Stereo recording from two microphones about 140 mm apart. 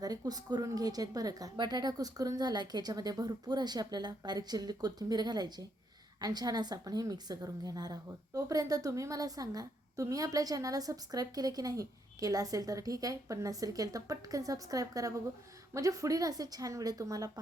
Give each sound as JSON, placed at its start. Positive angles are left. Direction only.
{"t": 0.0, "sound": "a woman's voice", "side_deg": -25}